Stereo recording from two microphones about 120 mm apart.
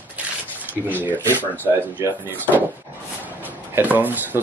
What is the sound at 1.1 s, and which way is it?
Speech, 15° left (ahead or behind).